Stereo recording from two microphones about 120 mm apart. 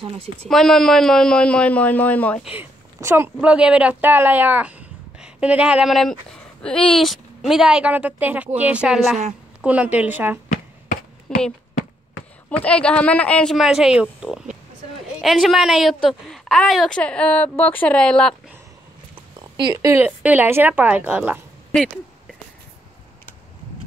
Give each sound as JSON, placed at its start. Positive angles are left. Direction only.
{"t": 0.0, "sound": "speech", "side_deg": -55}
{"t": 0.5, "sound": "a man's voice", "side_deg": 5}
{"t": 2.4, "sound": "a woman's voice", "side_deg": -15}
{"t": 3.3, "sound": "a woman's voice", "side_deg": -10}
{"t": 11.3, "sound": "a woman's voice", "side_deg": 5}
{"t": 12.6, "sound": "a man's voice", "side_deg": 10}
{"t": 13.6, "sound": "a woman's voice", "side_deg": -5}
{"t": 15.2, "sound": "a woman's voice", "side_deg": 0}
{"t": 19.1, "sound": "a sound", "side_deg": -40}
{"t": 19.8, "sound": "a woman's voice", "side_deg": -25}
{"t": 21.7, "sound": "a woman's voice", "side_deg": 0}